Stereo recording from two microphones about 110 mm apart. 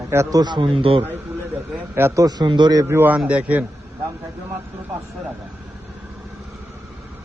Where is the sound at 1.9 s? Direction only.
25° right (ahead or behind).